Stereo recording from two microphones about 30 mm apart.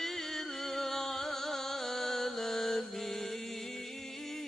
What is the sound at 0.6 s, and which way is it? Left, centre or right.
Music, centre.